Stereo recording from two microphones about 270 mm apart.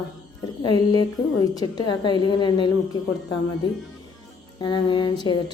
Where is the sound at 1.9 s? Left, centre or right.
Centre.